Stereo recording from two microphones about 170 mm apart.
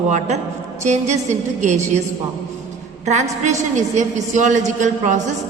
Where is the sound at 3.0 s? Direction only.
45° right (ahead or behind).